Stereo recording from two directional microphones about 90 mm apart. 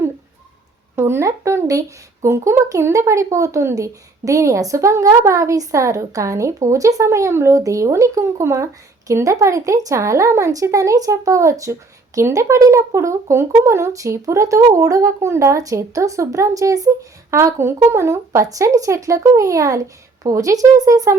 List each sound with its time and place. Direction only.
0.9 s speech: 25° right (ahead or behind)